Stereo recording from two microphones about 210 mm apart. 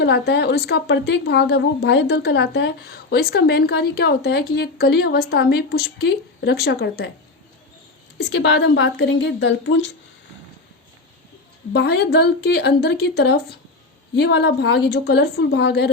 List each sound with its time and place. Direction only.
0.0 s a woman's voice: 55° left (ahead or behind)
8.2 s a woman's voice: 55° left (ahead or behind)
11.7 s a woman's voice: 50° left (ahead or behind)